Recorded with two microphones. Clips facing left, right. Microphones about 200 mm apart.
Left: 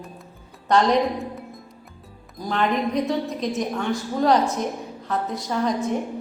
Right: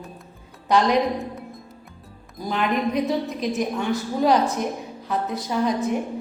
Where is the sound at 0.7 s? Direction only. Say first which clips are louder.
Even; centre (ahead or behind).